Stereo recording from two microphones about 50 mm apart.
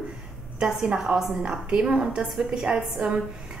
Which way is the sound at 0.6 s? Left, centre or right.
Centre.